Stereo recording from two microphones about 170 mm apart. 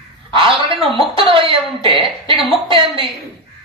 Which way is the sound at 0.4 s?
35° right (ahead or behind).